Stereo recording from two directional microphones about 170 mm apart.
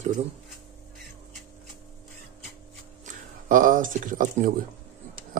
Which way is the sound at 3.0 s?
50° right (ahead or behind).